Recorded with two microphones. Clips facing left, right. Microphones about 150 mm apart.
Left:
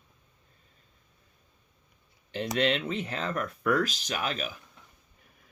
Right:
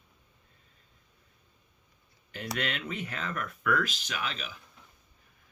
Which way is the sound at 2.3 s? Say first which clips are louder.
Left 7 dB; 25° left (ahead or behind).